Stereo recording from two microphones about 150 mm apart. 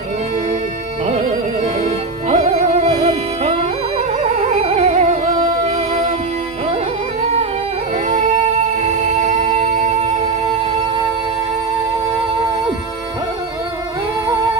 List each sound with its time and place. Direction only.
2.3 s music: 45° right (ahead or behind)
9.2 s music: 50° right (ahead or behind)